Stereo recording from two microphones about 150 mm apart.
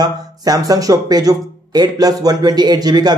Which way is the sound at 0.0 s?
25° right (ahead or behind).